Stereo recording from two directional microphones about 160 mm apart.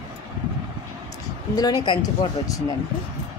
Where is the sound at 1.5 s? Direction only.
25° left (ahead or behind).